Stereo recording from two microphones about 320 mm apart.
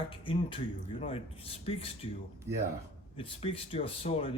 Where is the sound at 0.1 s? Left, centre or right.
Centre.